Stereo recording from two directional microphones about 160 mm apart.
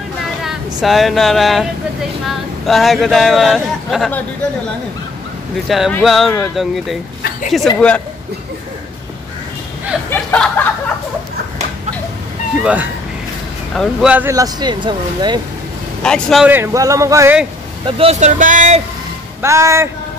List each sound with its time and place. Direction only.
0.4 s speech: centre (ahead or behind)
5.7 s speech: centre (ahead or behind)
10.0 s a sound: 10° left (ahead or behind)
13.7 s speech: 10° right (ahead or behind)
14.3 s speech: 25° right (ahead or behind)
16.0 s speech: 5° left (ahead or behind)
16.4 s speech: 15° right (ahead or behind)
17.8 s speech: 35° right (ahead or behind)
18.4 s speech: 55° right (ahead or behind)
19.4 s speech: 20° right (ahead or behind)